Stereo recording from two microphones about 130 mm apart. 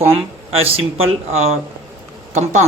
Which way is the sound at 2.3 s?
65° right (ahead or behind).